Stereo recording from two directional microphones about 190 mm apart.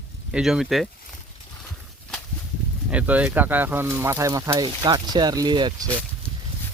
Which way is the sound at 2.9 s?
10° right (ahead or behind).